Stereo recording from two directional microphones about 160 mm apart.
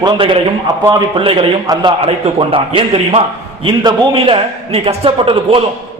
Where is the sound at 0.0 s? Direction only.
30° right (ahead or behind).